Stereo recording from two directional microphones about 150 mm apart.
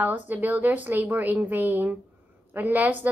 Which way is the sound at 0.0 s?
10° right (ahead or behind).